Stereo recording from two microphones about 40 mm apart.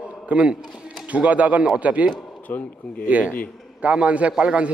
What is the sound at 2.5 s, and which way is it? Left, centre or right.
Speech, left.